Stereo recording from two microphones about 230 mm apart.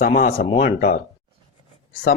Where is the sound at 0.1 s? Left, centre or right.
Left.